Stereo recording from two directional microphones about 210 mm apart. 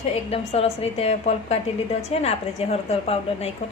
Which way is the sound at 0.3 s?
30° left (ahead or behind).